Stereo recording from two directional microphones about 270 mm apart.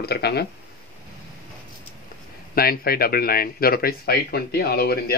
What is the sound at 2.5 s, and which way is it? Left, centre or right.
Speech, left.